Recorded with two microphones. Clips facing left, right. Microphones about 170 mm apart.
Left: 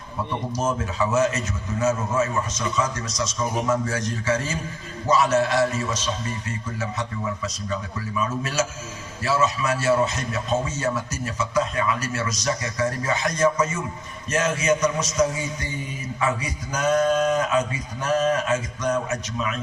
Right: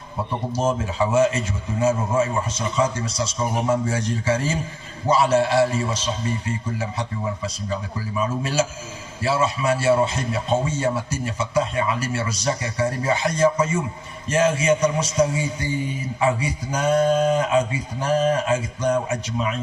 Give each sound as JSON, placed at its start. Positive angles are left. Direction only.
{"t": 0.5, "sound": "a man's voice", "side_deg": -30}